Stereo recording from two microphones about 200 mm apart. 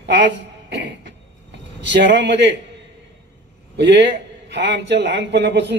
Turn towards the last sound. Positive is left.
turn(degrees=-60)  # may be behind; listen again after turning